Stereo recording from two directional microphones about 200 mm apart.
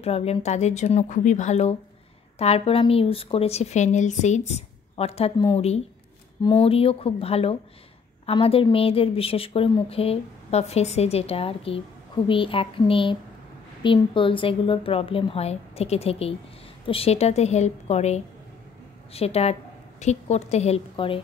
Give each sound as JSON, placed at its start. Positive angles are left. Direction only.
{"t": 0.0, "sound": "a woman's voice", "side_deg": 30}